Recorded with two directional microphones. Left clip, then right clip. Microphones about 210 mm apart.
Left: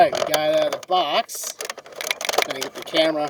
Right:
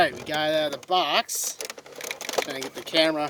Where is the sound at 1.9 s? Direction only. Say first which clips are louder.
Left 7 dB; 25° left (ahead or behind).